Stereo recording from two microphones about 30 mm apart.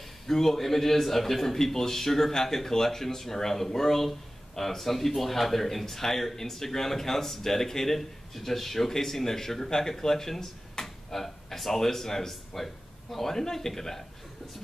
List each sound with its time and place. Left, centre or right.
0.3 s speech: centre